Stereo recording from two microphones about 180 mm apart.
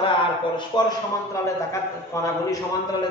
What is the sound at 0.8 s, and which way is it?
Speech, 25° left (ahead or behind).